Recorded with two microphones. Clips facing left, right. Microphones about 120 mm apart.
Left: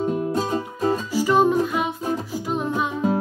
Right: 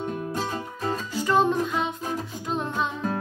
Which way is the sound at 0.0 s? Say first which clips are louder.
Left 6 dB; 10° left (ahead or behind).